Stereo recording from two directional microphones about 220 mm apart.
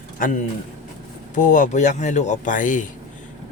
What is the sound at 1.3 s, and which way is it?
Speech, 35° left (ahead or behind).